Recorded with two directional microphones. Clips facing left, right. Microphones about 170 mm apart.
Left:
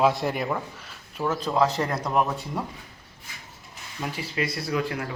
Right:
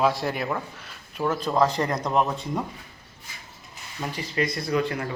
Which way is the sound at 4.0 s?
5° left (ahead or behind).